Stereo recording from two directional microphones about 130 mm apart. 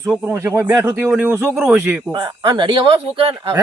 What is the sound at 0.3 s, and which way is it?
Speech, 20° right (ahead or behind).